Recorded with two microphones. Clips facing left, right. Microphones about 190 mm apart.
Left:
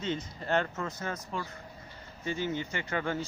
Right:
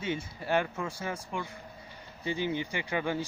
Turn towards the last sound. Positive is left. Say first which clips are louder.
# right 1 dB
turn(degrees=-15)  # may be behind; listen again after turning